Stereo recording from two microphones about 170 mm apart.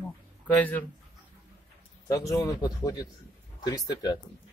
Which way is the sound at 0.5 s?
10° left (ahead or behind).